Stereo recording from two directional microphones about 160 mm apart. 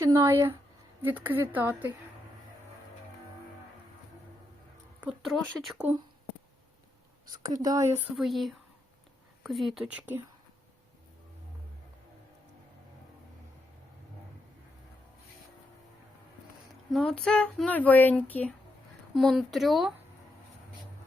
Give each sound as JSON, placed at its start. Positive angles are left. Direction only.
{"t": 0.0, "sound": "a woman's voice", "side_deg": -15}
{"t": 5.0, "sound": "speech", "side_deg": 0}
{"t": 7.6, "sound": "speech", "side_deg": -20}
{"t": 8.1, "sound": "speech", "side_deg": 0}
{"t": 16.9, "sound": "speech", "side_deg": 5}